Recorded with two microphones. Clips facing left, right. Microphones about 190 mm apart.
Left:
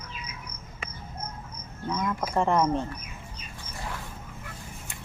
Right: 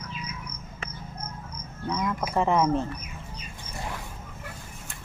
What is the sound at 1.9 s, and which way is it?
Speech, centre (ahead or behind).